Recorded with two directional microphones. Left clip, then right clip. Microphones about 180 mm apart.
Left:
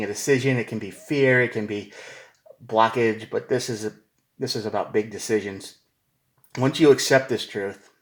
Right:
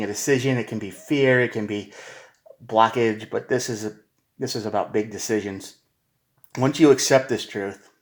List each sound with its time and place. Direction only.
0.0 s speech: 20° right (ahead or behind)